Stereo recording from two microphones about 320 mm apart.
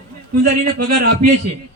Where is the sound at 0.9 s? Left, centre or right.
Right.